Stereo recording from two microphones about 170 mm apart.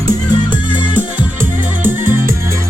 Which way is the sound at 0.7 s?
10° right (ahead or behind).